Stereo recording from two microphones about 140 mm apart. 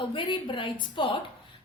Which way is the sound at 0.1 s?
35° left (ahead or behind).